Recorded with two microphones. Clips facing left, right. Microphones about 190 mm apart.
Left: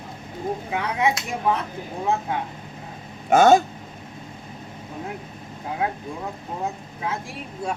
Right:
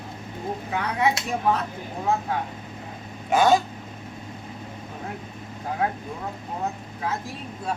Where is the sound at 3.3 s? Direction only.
45° left (ahead or behind).